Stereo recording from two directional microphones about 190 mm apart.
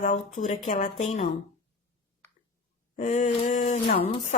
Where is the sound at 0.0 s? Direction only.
40° left (ahead or behind).